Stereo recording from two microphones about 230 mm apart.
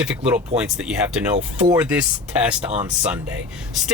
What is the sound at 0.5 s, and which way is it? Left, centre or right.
Speech, centre.